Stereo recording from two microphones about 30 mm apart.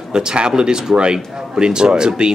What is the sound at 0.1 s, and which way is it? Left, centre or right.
A man's voice, right.